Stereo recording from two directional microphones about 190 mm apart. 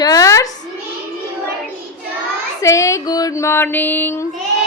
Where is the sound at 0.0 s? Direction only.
20° left (ahead or behind).